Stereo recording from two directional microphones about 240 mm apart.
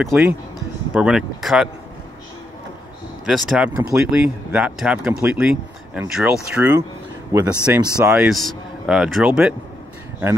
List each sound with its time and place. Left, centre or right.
0.0 s speech: centre
3.3 s speech: centre